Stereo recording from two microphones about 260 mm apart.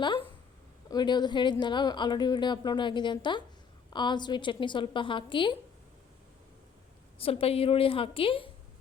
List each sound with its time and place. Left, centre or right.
0.9 s speech: centre
7.2 s a woman's voice: left